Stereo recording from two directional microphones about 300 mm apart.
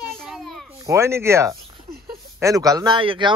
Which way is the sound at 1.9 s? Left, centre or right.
Right.